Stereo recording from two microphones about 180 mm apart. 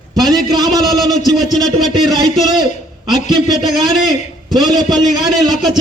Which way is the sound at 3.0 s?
25° right (ahead or behind).